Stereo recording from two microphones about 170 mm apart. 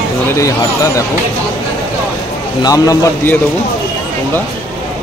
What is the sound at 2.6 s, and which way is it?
Speech, 20° left (ahead or behind).